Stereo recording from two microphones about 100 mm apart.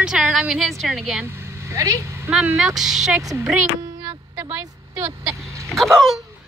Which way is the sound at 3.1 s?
30° right (ahead or behind).